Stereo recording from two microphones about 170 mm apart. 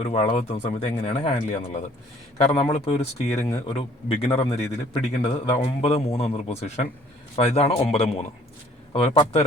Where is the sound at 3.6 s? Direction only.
35° left (ahead or behind).